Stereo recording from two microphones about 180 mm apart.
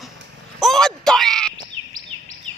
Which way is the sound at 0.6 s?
Centre (ahead or behind).